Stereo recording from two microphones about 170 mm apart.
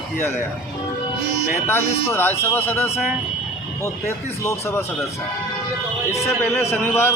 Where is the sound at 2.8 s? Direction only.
40° left (ahead or behind).